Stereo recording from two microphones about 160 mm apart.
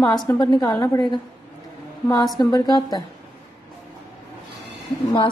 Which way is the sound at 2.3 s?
25° left (ahead or behind).